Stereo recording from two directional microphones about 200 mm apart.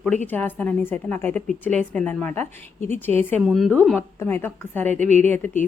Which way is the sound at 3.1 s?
30° right (ahead or behind).